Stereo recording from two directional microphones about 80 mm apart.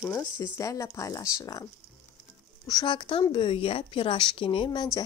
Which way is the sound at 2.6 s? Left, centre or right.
Left.